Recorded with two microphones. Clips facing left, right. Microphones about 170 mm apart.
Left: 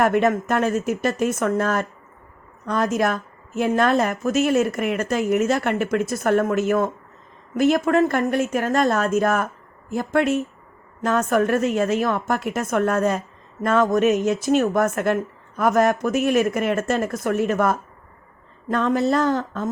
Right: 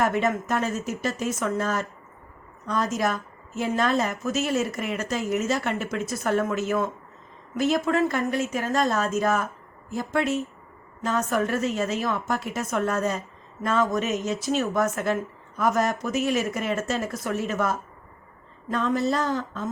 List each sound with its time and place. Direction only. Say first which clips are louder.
0.0 s a woman's voice: left 5 dB; 60° left (ahead or behind)